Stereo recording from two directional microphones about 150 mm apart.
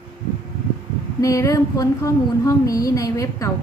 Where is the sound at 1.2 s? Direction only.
20° left (ahead or behind).